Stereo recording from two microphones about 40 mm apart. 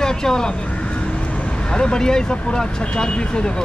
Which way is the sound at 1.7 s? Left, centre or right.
Centre.